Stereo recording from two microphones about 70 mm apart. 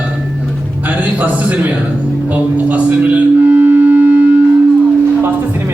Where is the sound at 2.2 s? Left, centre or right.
Right.